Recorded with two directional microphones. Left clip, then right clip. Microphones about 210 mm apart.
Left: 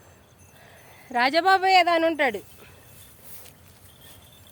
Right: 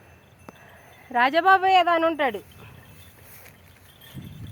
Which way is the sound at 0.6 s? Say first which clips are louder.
Right 1 dB; 10° left (ahead or behind).